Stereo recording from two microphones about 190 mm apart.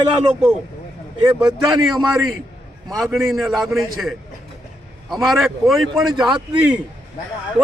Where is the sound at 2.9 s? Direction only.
Centre (ahead or behind).